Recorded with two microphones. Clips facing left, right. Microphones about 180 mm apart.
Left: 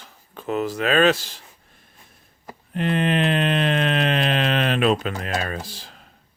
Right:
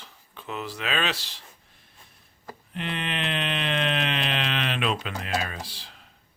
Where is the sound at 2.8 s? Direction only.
45° left (ahead or behind).